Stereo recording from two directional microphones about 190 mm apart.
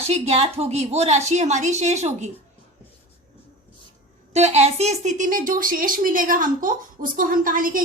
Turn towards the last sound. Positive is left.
turn(degrees=-45)  # may be behind; listen again after turning